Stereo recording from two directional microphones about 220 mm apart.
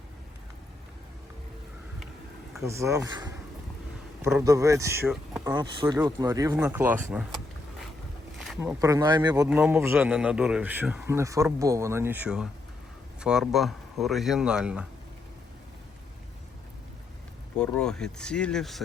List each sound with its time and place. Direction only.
2.6 s a man's voice: 15° right (ahead or behind)
8.4 s a man's voice: 10° right (ahead or behind)
9.5 s a man's voice: 5° right (ahead or behind)
17.6 s speech: 5° left (ahead or behind)